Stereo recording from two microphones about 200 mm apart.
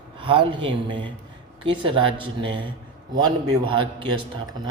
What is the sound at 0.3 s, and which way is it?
Speech, 25° right (ahead or behind).